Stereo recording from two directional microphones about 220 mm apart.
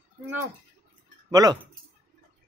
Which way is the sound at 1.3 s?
20° right (ahead or behind).